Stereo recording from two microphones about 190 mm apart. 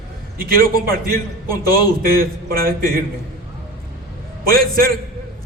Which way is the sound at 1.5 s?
20° left (ahead or behind).